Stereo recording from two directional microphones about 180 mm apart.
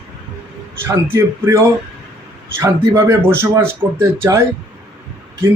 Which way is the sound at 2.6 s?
15° right (ahead or behind).